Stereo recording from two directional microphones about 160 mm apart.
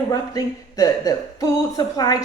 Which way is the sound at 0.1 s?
25° left (ahead or behind).